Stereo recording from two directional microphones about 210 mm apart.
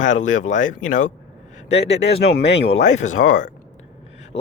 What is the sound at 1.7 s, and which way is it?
Speech, 55° left (ahead or behind).